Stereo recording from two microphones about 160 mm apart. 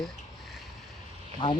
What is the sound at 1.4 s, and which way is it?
Speech, 25° left (ahead or behind).